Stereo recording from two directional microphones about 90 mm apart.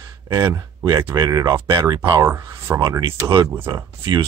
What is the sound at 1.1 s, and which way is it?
Speech, 45° right (ahead or behind).